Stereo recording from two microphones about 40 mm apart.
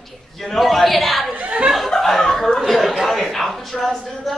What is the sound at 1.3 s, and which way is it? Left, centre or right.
Chuckle, right.